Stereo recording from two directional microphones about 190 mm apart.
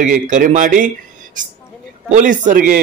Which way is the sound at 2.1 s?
45° right (ahead or behind).